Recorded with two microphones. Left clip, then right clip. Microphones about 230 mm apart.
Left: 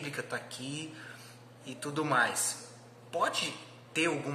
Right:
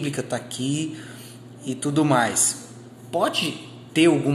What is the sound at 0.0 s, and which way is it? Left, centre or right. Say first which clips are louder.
A man's voice: right 10 dB; centre.